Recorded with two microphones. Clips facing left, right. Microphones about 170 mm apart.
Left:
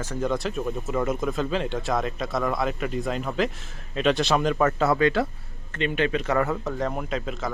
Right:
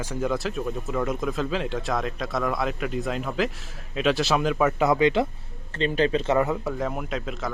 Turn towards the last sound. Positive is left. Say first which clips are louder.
# left 1 dB
turn(degrees=0)  # may be behind; listen again after turning